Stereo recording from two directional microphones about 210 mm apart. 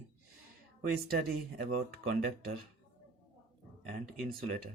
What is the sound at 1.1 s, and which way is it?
Speech, 45° right (ahead or behind).